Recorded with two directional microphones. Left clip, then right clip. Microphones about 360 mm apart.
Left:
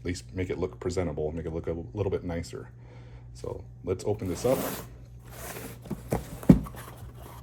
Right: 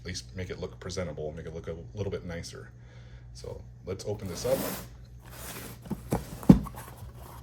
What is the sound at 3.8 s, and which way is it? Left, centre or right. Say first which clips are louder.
Speech: left 6 dB; centre.